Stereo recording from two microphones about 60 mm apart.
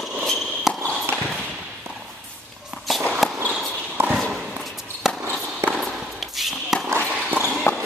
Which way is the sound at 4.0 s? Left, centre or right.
Right.